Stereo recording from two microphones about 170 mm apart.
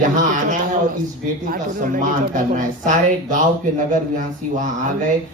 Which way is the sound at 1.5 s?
55° right (ahead or behind).